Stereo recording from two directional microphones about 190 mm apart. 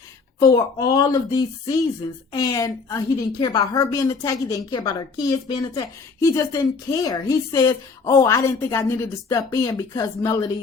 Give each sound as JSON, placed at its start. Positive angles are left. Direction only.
{"t": 0.3, "sound": "a woman's voice", "side_deg": 20}